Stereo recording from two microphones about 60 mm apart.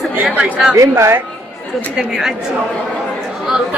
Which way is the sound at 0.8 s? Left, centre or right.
Right.